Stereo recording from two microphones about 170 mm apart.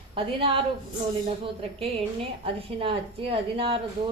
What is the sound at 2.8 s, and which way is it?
Speech, 30° right (ahead or behind).